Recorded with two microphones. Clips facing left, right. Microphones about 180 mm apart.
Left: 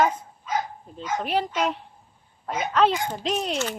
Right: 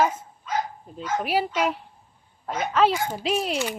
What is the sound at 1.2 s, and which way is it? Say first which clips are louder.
A woman's voice: right 1 dB; 5° right (ahead or behind).